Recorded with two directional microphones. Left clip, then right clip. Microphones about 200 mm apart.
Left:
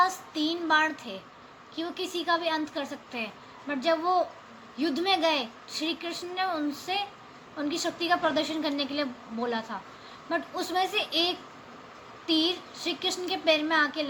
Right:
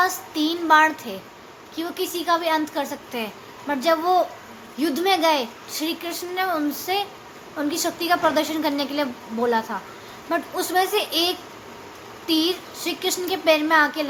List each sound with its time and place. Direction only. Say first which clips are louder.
0.0 s a woman's voice: right 4 dB; 15° right (ahead or behind)